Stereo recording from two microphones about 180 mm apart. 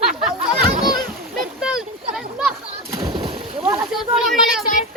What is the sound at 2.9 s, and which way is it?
Splash, 25° right (ahead or behind).